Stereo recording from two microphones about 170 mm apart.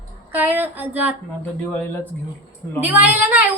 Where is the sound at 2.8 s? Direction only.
10° right (ahead or behind).